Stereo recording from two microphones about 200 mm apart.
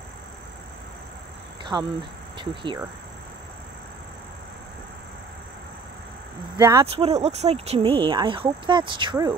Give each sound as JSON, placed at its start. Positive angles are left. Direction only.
{"t": 1.6, "sound": "speech", "side_deg": -25}
{"t": 6.6, "sound": "speech", "side_deg": -15}
{"t": 6.9, "sound": "speech", "side_deg": -30}